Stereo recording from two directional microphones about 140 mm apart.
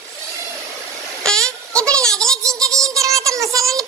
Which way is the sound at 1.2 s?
5° left (ahead or behind).